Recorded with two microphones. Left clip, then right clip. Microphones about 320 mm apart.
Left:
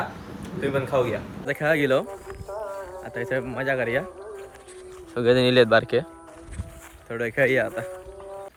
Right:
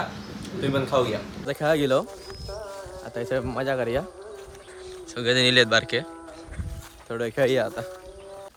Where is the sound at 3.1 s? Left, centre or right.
Centre.